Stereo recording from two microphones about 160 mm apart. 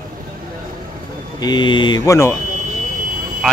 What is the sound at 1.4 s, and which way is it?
Speech, 30° left (ahead or behind).